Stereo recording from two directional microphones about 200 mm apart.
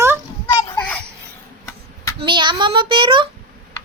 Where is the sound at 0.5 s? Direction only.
10° left (ahead or behind).